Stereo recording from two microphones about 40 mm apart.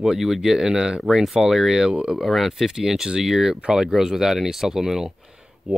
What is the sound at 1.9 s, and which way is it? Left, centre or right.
Speech, right.